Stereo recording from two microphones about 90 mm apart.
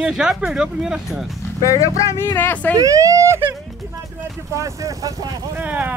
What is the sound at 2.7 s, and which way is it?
Speech, 40° right (ahead or behind).